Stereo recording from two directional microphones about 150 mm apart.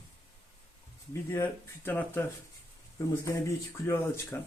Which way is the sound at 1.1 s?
15° left (ahead or behind).